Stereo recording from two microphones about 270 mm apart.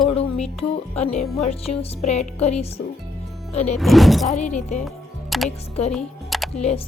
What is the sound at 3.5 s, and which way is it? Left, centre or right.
Music, left.